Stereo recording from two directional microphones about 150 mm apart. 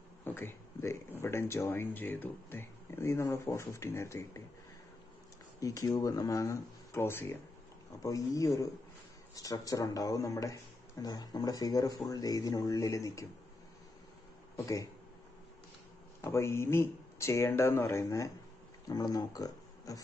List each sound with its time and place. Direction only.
0.2 s a sound: 15° left (ahead or behind)
1.2 s speech: 15° left (ahead or behind)
5.6 s speech: 20° left (ahead or behind)
16.2 s speech: 20° left (ahead or behind)